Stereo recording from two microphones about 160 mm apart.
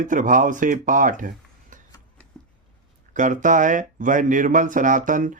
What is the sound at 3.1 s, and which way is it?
Speech, 50° right (ahead or behind).